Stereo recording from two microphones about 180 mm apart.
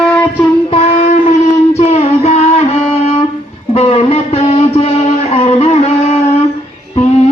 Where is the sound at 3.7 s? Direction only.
35° left (ahead or behind).